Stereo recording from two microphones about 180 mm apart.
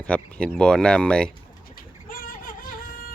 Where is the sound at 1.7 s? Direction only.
50° left (ahead or behind).